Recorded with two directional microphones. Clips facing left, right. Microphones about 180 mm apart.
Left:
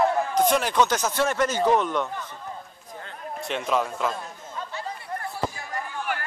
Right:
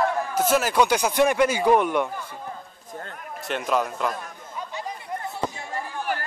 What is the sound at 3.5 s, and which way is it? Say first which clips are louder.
Speech: right 1 dB; centre (ahead or behind).